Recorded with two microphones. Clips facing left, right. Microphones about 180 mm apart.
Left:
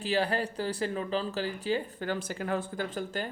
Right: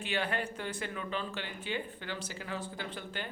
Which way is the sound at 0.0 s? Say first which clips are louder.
Left 6 dB; 35° left (ahead or behind).